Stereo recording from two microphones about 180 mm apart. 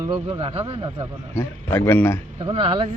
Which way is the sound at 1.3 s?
10° left (ahead or behind).